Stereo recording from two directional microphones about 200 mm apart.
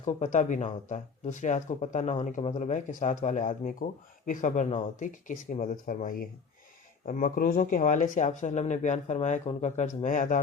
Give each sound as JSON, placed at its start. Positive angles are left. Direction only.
{"t": 0.0, "sound": "speech", "side_deg": 35}